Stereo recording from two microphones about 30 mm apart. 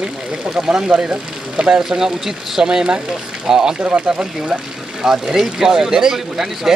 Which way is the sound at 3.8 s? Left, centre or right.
Right.